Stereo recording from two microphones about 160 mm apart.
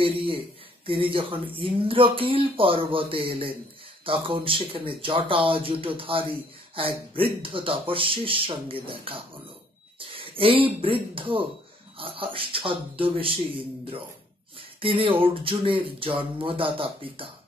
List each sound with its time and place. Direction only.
0.0 s speech: 35° right (ahead or behind)
14.8 s speech: 35° right (ahead or behind)